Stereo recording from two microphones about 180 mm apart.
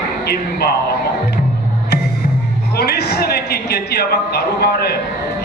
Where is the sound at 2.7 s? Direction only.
60° left (ahead or behind).